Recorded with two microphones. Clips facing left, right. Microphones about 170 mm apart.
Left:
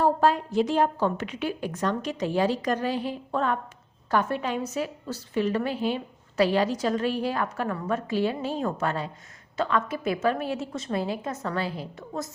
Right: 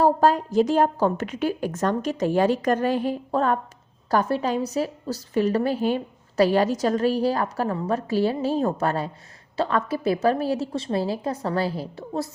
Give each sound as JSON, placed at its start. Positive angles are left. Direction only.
{"t": 0.0, "sound": "a woman's voice", "side_deg": -40}